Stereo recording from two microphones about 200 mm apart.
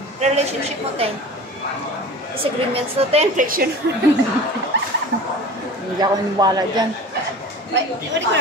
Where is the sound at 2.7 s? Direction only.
30° right (ahead or behind).